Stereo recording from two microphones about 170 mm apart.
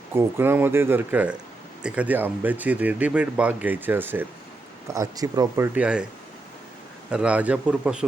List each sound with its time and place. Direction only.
0.1 s speech: 15° right (ahead or behind)
7.1 s speech: 5° right (ahead or behind)